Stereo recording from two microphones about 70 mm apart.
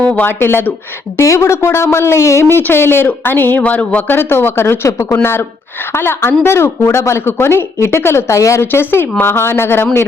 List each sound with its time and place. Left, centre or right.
0.0 s speech: centre
0.3 s speech: left
1.2 s speech: left
8.7 s speech: left